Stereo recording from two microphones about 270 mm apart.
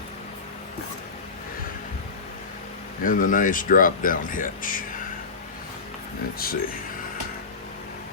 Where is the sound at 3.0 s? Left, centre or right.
Left.